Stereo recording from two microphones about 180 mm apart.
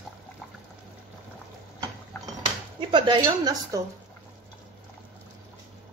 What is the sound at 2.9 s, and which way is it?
Speech, 25° right (ahead or behind).